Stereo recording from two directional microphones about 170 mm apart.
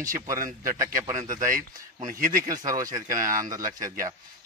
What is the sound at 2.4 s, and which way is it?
Speech, 20° right (ahead or behind).